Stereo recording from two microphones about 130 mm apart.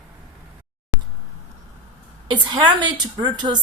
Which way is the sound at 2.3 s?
35° right (ahead or behind).